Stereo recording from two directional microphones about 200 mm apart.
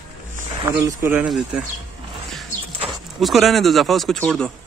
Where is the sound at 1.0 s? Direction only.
5° right (ahead or behind).